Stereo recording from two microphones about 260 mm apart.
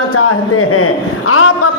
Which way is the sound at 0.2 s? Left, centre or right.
Left.